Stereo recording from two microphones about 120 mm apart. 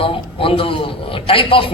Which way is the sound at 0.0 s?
50° left (ahead or behind).